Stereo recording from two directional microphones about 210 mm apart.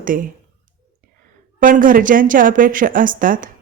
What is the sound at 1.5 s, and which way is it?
A woman's voice, 40° right (ahead or behind).